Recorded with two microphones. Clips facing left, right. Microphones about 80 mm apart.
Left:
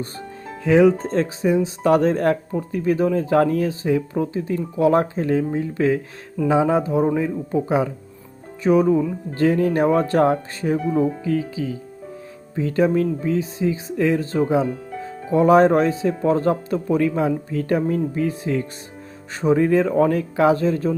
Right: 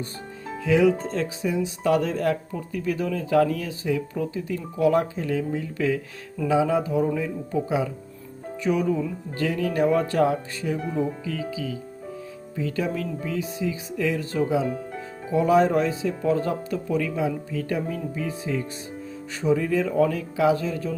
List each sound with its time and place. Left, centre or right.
0.6 s speech: left
15.3 s speech: left